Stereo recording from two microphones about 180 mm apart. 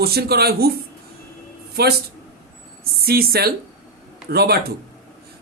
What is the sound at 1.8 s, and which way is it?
A man's voice, 65° right (ahead or behind).